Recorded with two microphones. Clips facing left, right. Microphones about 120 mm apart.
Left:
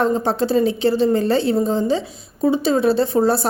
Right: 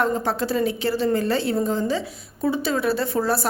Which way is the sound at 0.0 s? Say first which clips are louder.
Left 4 dB; 25° left (ahead or behind).